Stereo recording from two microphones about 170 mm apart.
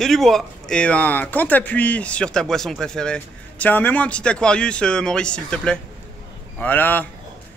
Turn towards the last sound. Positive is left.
turn(degrees=10)  # may be behind; listen again after turning